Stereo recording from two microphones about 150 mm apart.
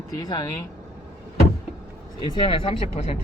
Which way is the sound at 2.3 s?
35° left (ahead or behind).